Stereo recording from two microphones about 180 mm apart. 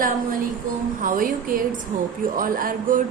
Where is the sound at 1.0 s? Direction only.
50° right (ahead or behind).